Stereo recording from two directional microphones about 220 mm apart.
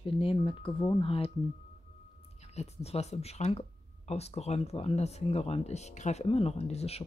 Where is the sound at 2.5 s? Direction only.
30° left (ahead or behind).